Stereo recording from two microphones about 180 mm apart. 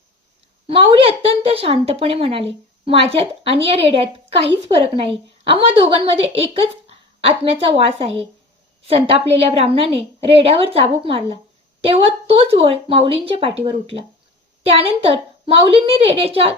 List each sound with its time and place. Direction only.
0.7 s a woman's voice: 30° right (ahead or behind)